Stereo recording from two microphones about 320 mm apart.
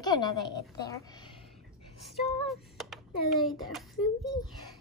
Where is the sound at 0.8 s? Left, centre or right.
Centre.